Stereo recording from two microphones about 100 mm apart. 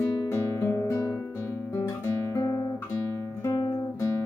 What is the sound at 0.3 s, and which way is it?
Guitar, 25° left (ahead or behind).